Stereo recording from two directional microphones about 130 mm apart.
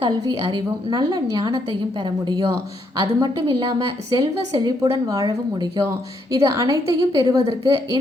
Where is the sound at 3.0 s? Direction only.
30° right (ahead or behind).